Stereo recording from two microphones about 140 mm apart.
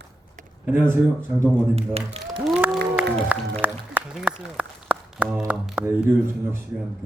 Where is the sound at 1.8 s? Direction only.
50° right (ahead or behind).